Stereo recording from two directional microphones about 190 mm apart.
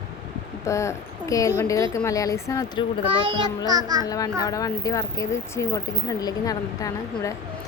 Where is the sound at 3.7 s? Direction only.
20° right (ahead or behind).